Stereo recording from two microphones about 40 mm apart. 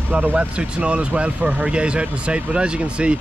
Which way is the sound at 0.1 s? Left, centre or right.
Right.